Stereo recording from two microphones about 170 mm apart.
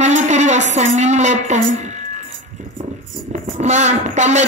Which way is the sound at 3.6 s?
40° right (ahead or behind).